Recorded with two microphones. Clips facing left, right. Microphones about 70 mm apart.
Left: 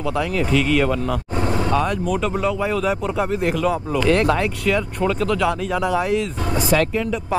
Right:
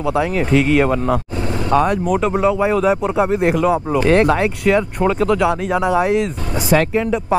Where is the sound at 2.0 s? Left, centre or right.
Centre.